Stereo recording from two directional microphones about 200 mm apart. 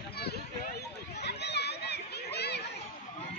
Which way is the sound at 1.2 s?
55° left (ahead or behind).